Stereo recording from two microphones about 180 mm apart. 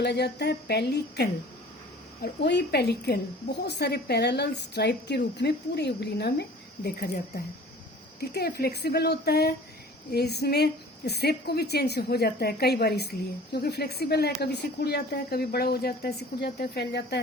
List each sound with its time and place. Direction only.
0.0 s a woman's voice: 65° left (ahead or behind)